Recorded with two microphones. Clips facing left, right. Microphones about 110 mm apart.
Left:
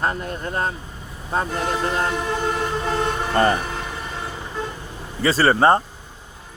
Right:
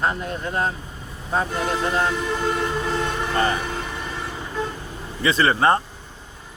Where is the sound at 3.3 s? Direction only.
40° left (ahead or behind).